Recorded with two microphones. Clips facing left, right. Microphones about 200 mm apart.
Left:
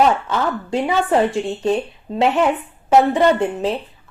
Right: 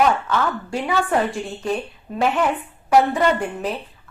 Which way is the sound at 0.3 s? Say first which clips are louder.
Left 2 dB; 25° left (ahead or behind).